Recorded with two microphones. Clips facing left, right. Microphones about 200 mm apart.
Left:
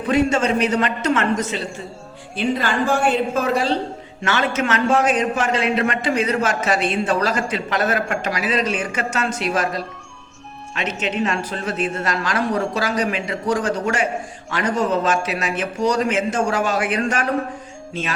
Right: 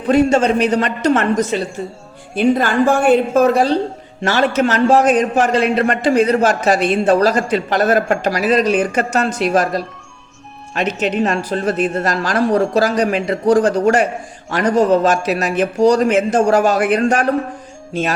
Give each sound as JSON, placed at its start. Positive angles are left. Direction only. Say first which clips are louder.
{"t": 0.1, "sound": "a woman's voice", "louder": "right 5 dB", "side_deg": -40}
{"t": 13.8, "sound": "a woman's voice", "louder": "right 8 dB", "side_deg": -50}
{"t": 14.8, "sound": "speech", "louder": "right 7 dB", "side_deg": -35}
{"t": 16.0, "sound": "speech", "louder": "right 6 dB", "side_deg": -50}